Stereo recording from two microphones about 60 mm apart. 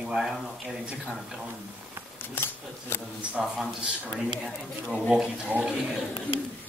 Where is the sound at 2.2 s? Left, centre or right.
Left.